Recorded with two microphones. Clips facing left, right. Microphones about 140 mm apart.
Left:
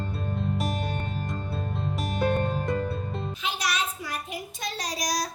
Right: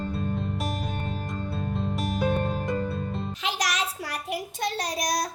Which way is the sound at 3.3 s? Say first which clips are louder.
Right 1 dB; 90° right.